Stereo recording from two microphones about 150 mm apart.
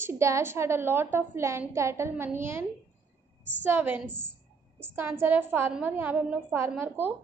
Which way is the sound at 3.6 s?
15° right (ahead or behind).